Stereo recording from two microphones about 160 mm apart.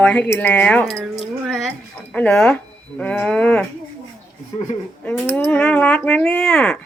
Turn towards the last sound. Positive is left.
turn(degrees=10)  # may be behind; listen again after turning